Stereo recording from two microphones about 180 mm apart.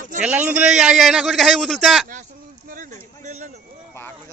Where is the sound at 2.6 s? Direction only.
50° right (ahead or behind).